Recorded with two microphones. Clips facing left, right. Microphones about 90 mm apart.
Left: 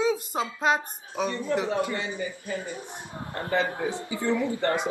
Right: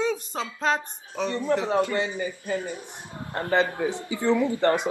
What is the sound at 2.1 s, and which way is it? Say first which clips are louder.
Speech: right 3 dB; 75° right (ahead or behind).